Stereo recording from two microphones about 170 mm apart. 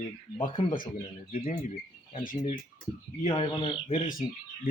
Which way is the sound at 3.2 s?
30° left (ahead or behind).